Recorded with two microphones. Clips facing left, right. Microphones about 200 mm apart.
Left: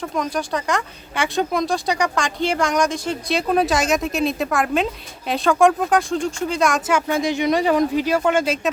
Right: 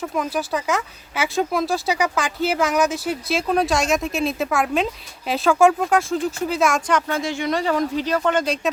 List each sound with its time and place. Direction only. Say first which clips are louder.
0.0 s speech: even; 5° right (ahead or behind)